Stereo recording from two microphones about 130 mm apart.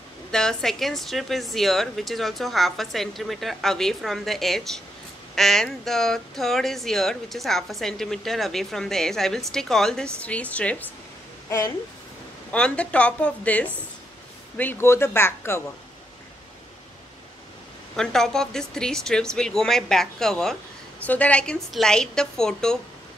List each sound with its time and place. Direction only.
0.3 s a woman's voice: 5° left (ahead or behind)
11.4 s a woman's voice: 25° left (ahead or behind)
12.4 s a woman's voice: 10° left (ahead or behind)
17.9 s speech: 5° left (ahead or behind)